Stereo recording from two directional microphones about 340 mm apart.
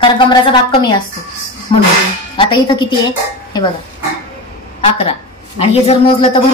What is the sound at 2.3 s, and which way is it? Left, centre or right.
Speech, centre.